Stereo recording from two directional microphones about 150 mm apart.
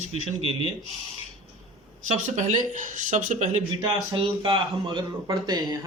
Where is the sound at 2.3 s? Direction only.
55° right (ahead or behind).